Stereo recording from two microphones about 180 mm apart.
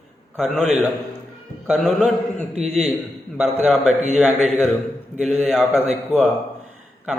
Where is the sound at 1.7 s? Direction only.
5° right (ahead or behind).